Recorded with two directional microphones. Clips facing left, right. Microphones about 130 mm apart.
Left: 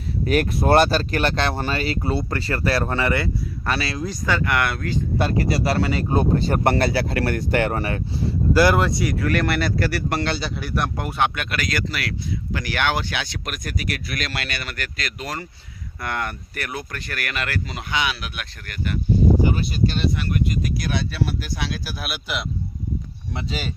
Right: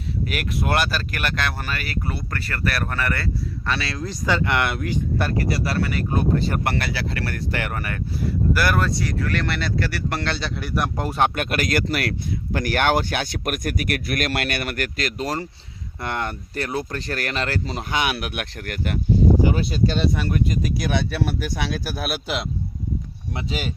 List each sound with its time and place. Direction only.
0.3 s speech: 35° left (ahead or behind); by 3.2 s 20° left (ahead or behind)
3.7 s speech: 5° left (ahead or behind)
4.3 s speech: 20° right (ahead or behind)
5.1 s speech: 20° left (ahead or behind)
9.0 s speech: 5° left (ahead or behind)
11.0 s speech: 40° right (ahead or behind)
16.0 s speech: 25° right (ahead or behind)
17.9 s speech: 55° right (ahead or behind)
21.1 s speech: 60° right (ahead or behind)
23.3 s speech: 10° right (ahead or behind)